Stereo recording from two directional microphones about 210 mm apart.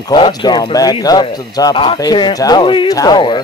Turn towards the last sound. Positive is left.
turn(degrees=20)  # may be behind; listen again after turning